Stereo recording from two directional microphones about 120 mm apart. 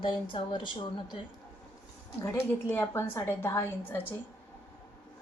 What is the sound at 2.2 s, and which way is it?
A woman's voice, 20° left (ahead or behind).